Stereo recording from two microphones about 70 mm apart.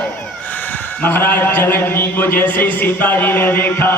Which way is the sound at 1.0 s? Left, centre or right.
Left.